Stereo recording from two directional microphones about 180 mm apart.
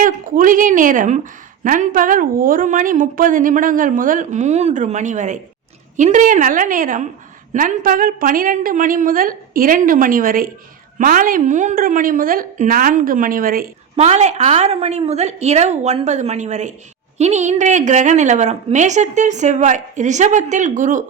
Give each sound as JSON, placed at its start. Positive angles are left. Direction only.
{"t": 0.0, "sound": "a woman's voice", "side_deg": -50}
{"t": 13.9, "sound": "a woman's voice", "side_deg": -35}